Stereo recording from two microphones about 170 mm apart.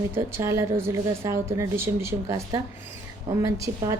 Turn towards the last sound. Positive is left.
turn(degrees=-20)  # may be behind; listen again after turning